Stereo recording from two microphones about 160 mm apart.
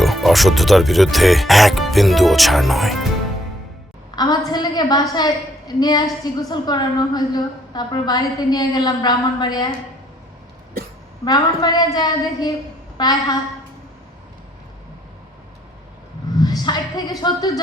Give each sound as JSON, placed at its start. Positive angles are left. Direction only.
{"t": 0.0, "sound": "speech", "side_deg": 0}
{"t": 4.1, "sound": "a woman's voice", "side_deg": 25}
{"t": 11.3, "sound": "a woman's voice", "side_deg": 25}
{"t": 16.3, "sound": "speech", "side_deg": 25}